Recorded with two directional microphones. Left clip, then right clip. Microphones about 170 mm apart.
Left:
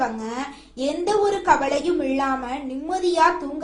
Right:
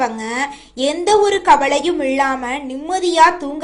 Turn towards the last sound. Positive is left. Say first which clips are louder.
# right 6 dB
turn(degrees=-15)  # may be behind; listen again after turning